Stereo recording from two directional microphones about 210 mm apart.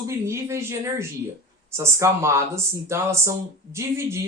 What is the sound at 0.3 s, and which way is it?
Speech, 15° right (ahead or behind).